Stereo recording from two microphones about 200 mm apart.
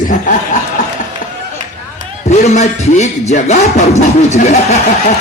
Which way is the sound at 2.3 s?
35° left (ahead or behind).